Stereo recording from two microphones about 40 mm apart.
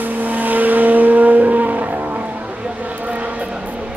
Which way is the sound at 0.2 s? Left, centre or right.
Right.